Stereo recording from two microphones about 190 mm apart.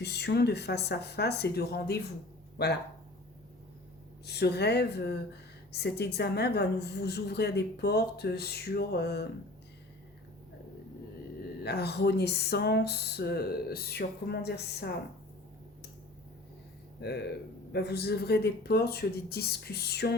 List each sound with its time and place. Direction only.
0.0 s a woman's voice: 60° left (ahead or behind)
4.3 s a woman's voice: 60° left (ahead or behind)
11.6 s a woman's voice: 60° left (ahead or behind)
17.0 s a woman's voice: 60° left (ahead or behind)